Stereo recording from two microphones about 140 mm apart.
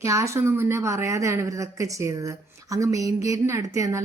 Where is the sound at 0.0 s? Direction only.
20° right (ahead or behind).